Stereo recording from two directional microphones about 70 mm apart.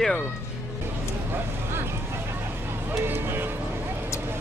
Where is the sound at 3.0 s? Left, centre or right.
Right.